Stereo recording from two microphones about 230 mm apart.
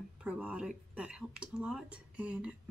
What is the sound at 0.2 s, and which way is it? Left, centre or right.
Speech, centre.